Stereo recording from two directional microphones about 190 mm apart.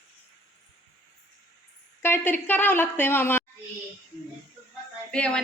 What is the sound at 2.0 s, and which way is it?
A woman's voice, 10° left (ahead or behind).